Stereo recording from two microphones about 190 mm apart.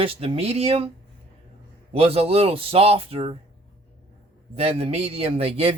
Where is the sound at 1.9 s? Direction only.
30° right (ahead or behind).